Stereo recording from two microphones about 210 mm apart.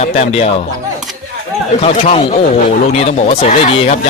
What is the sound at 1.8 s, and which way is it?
Speech, 30° left (ahead or behind).